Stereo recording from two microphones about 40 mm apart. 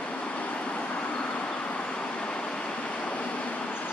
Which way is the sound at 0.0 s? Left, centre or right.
Left.